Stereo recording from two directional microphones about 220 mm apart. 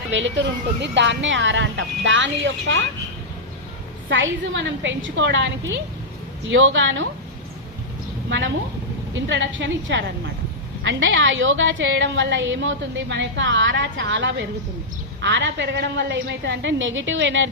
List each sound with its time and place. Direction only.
0.1 s a woman's voice: 55° right (ahead or behind)
4.1 s a woman's voice: 55° right (ahead or behind)
6.5 s a woman's voice: 60° right (ahead or behind)
8.3 s a woman's voice: 55° right (ahead or behind)